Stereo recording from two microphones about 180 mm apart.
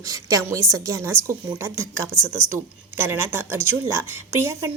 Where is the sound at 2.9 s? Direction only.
10° right (ahead or behind).